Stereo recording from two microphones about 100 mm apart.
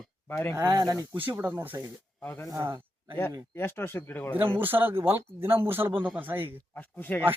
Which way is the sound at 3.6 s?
20° left (ahead or behind).